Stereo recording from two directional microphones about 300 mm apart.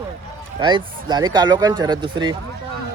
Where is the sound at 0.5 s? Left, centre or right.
Centre.